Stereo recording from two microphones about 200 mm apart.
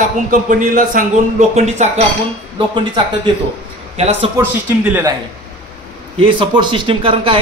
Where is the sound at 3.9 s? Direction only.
30° right (ahead or behind).